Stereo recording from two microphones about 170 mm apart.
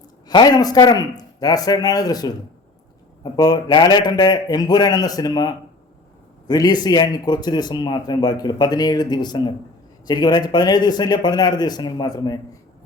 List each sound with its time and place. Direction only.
0.3 s speech: 25° left (ahead or behind)
3.3 s speech: 25° left (ahead or behind)